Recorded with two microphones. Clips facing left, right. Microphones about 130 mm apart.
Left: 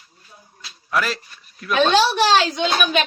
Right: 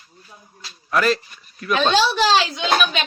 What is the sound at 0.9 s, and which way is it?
Speech, centre (ahead or behind).